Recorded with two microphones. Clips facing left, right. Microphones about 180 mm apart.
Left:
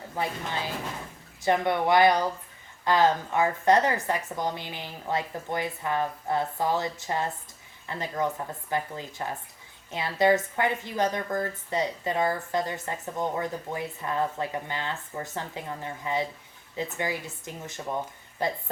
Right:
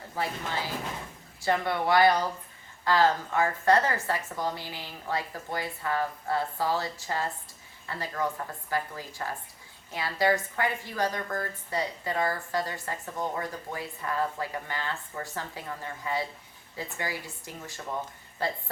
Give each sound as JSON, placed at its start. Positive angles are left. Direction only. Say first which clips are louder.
{"t": 0.2, "sound": "a woman's voice", "louder": "left 1 dB", "side_deg": 20}